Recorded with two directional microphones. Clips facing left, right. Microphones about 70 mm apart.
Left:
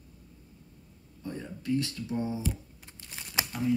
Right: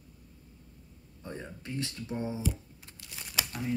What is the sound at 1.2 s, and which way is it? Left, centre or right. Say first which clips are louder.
Speech: left 5 dB; right.